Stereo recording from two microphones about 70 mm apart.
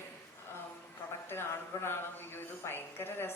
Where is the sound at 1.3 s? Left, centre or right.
Left.